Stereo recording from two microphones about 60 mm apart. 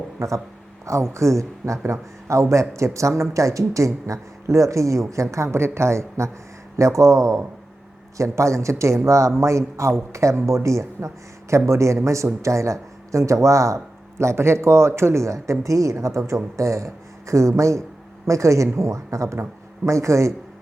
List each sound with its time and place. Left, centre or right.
0.2 s a man's voice: right